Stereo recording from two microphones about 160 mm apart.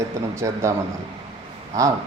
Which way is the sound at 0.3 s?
20° right (ahead or behind).